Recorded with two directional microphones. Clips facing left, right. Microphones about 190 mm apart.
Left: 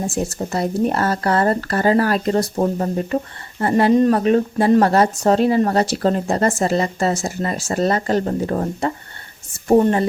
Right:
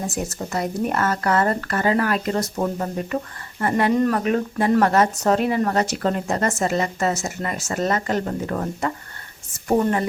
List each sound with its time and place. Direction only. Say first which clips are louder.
0.0 s speech: left 4 dB; 30° left (ahead or behind)